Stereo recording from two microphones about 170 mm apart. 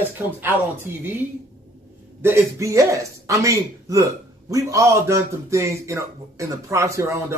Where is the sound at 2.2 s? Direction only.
15° right (ahead or behind).